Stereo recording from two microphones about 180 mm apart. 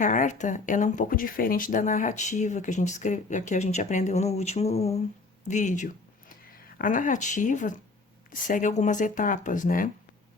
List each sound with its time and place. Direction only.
0.0 s speech: 45° left (ahead or behind)